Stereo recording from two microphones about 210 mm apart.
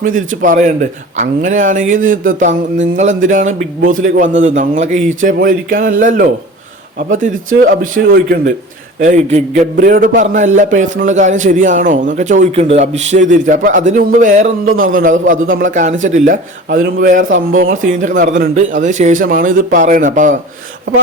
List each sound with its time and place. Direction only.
0.4 s a man's voice: 35° right (ahead or behind)